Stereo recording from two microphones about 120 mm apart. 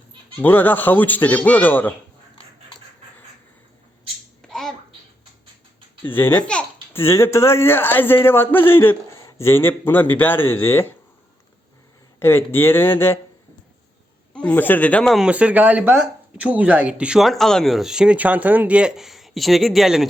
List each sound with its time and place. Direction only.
0.3 s speech: 15° left (ahead or behind)
4.4 s a sound: 5° left (ahead or behind)
6.0 s a man's voice: 15° left (ahead or behind)
12.2 s speech: 20° left (ahead or behind)
14.3 s speech: 10° left (ahead or behind)
15.1 s speech: 10° right (ahead or behind)